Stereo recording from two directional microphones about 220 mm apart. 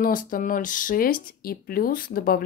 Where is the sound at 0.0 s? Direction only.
40° left (ahead or behind).